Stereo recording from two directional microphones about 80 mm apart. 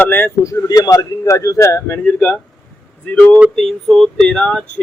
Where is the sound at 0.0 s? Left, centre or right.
Left.